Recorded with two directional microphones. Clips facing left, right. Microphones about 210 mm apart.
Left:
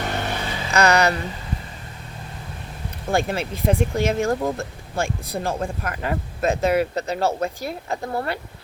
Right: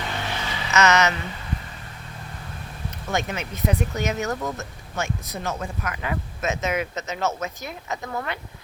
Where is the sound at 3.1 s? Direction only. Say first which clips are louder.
Left 5 dB; 30° left (ahead or behind).